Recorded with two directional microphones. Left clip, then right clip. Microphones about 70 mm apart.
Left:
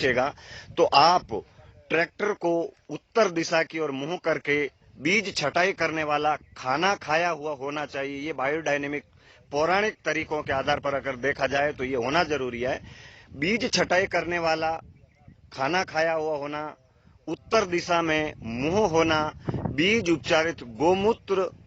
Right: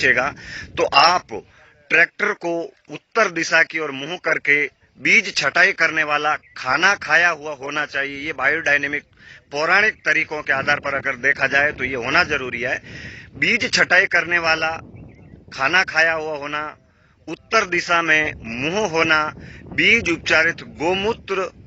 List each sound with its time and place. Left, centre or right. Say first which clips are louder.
0.0 s speech: right 7 dB; left
4.2 s a man's voice: right 8 dB; left; by 16.7 s centre
17.2 s speech: right 5 dB; left
19.7 s a man's voice: right 8 dB; left